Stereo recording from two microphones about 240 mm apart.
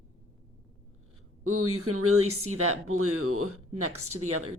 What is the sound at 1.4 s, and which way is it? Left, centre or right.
Speech, right.